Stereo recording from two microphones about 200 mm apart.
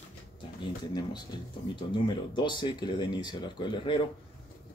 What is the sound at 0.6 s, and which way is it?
Speech, 20° left (ahead or behind).